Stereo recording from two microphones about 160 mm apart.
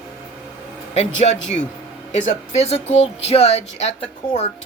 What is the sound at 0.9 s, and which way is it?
Speech, 45° left (ahead or behind).